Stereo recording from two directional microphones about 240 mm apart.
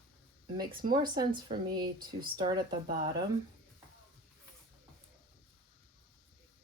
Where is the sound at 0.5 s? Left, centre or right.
Centre.